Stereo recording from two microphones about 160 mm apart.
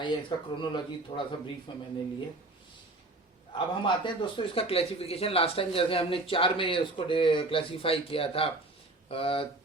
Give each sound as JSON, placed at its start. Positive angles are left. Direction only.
{"t": 0.0, "sound": "a man's voice", "side_deg": 30}
{"t": 3.5, "sound": "a man's voice", "side_deg": 30}